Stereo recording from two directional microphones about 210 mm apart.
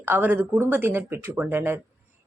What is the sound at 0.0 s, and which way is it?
A woman's voice, 10° right (ahead or behind).